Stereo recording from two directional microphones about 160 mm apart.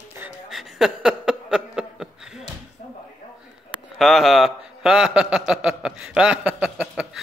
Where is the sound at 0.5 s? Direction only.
Centre (ahead or behind).